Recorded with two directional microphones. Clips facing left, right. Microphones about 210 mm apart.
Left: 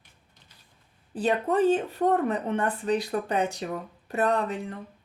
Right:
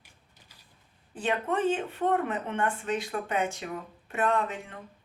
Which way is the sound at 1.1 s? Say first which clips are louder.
Left 5 dB; 35° left (ahead or behind).